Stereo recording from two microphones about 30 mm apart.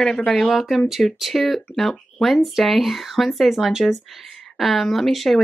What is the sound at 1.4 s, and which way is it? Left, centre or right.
Speech, centre.